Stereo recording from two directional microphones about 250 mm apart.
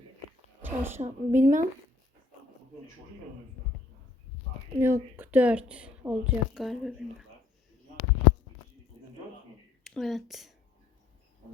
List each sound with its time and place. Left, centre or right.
0.6 s a sound: centre
1.0 s speech: right
4.8 s a woman's voice: centre
9.8 s speech: centre